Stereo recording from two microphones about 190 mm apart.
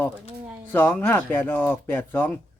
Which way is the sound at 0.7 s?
10° left (ahead or behind).